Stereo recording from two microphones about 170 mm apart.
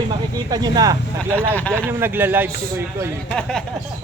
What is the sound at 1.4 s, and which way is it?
Speech, 10° left (ahead or behind).